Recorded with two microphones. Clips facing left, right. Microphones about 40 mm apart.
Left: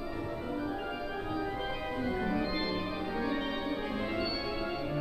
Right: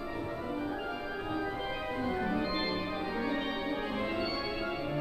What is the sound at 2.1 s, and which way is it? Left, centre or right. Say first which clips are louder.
Music: even; centre.